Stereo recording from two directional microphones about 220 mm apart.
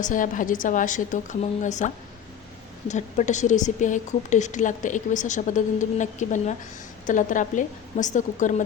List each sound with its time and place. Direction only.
0.0 s a woman's voice: 35° left (ahead or behind)